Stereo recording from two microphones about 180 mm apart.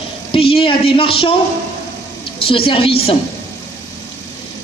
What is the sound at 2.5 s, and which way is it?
Speech, 30° left (ahead or behind).